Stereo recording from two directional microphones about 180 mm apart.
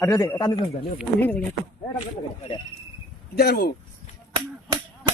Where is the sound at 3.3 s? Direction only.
65° left (ahead or behind).